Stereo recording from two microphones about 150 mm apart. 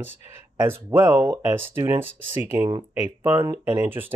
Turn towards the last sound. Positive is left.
turn(degrees=-15)  # may be behind; listen again after turning